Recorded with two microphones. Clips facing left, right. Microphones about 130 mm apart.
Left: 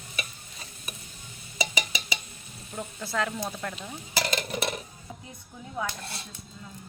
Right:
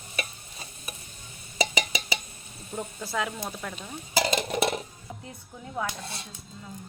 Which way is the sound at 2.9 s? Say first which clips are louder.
Left 3 dB; 10° right (ahead or behind).